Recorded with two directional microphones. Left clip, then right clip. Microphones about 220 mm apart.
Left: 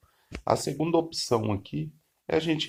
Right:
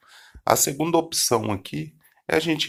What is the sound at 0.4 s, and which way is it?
Speech, 15° right (ahead or behind).